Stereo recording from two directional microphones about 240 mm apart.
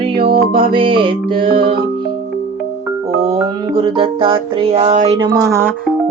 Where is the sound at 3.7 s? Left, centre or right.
Right.